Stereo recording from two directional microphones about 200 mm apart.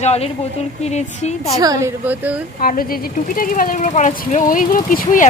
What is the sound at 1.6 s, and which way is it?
Speech, 15° right (ahead or behind).